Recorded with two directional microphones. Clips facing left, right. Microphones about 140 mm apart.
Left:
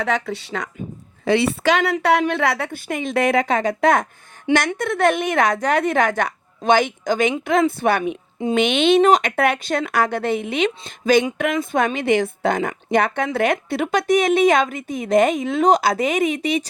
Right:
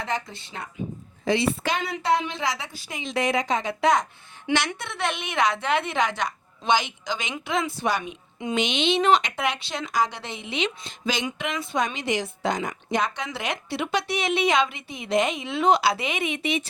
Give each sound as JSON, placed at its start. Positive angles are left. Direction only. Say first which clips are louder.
{"t": 0.0, "sound": "a woman's voice", "louder": "left 7 dB", "side_deg": 75}
{"t": 1.2, "sound": "a woman's voice", "louder": "left 6 dB", "side_deg": 65}